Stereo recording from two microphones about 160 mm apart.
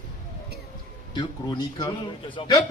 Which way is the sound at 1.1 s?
25° left (ahead or behind).